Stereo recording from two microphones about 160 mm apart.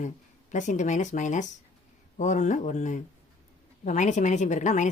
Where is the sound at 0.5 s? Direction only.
50° left (ahead or behind).